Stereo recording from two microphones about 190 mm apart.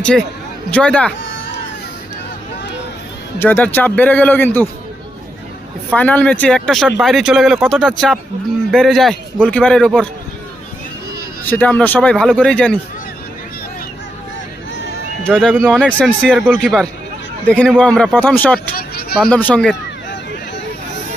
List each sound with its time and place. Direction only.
0.7 s speech: 5° left (ahead or behind)
3.3 s speech: 10° left (ahead or behind)
5.9 s speech: 5° left (ahead or behind)
11.4 s speech: 10° left (ahead or behind)
15.2 s speech: 5° left (ahead or behind)
18.7 s a sound: 55° left (ahead or behind)
19.3 s speech: 10° left (ahead or behind)